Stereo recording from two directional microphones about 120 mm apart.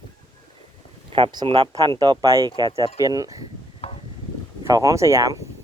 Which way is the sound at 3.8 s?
55° left (ahead or behind).